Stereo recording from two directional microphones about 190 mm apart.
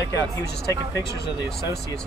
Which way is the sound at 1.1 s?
55° left (ahead or behind).